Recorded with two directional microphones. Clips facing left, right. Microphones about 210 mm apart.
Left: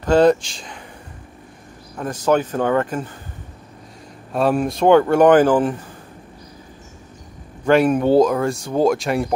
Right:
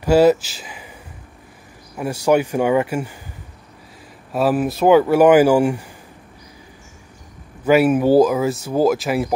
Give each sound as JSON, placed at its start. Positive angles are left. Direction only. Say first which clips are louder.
{"t": 0.0, "sound": "speech", "louder": "right 1 dB", "side_deg": -10}
{"t": 2.0, "sound": "speech", "louder": "right 2 dB", "side_deg": -10}
{"t": 4.3, "sound": "speech", "louder": "even", "side_deg": -5}
{"t": 7.6, "sound": "speech", "louder": "right 1 dB", "side_deg": -5}